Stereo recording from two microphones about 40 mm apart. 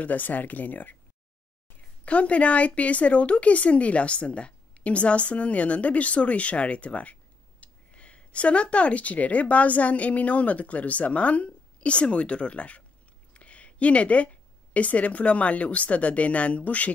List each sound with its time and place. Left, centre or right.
0.0 s speech: left
1.8 s speech: left